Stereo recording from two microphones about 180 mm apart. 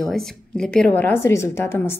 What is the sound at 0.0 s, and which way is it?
A woman's voice, 5° left (ahead or behind).